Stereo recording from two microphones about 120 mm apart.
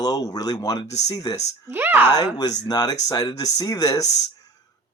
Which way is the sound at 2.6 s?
35° left (ahead or behind).